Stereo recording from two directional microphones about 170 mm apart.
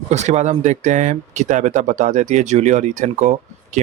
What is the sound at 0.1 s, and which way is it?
Speech, 40° right (ahead or behind).